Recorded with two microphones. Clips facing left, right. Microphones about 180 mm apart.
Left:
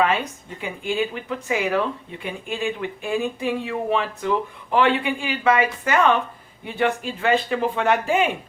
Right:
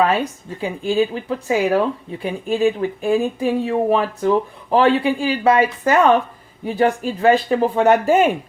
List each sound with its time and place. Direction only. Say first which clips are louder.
0.0 s speech: right 4 dB; 35° right (ahead or behind)